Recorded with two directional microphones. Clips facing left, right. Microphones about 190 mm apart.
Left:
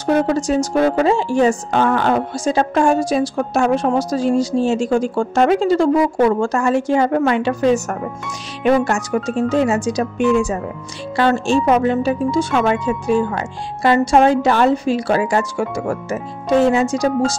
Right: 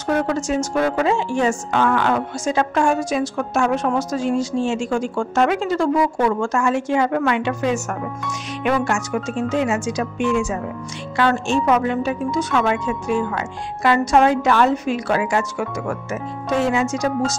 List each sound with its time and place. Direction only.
0.0 s a woman's voice: 35° left (ahead or behind)